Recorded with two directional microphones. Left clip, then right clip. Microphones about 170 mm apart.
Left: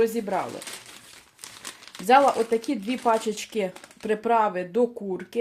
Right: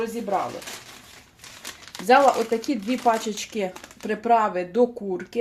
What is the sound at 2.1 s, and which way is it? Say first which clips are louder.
Speech: right 1 dB; 30° left (ahead or behind).